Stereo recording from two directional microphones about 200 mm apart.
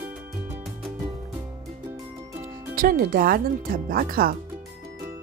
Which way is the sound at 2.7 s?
45° right (ahead or behind).